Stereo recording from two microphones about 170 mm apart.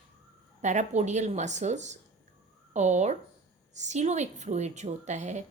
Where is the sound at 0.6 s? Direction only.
45° right (ahead or behind).